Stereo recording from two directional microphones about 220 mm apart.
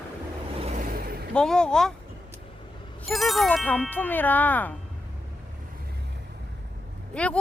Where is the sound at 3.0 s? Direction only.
Centre (ahead or behind).